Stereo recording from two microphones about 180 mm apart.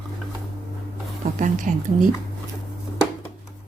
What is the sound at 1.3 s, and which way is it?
Speech, 45° right (ahead or behind).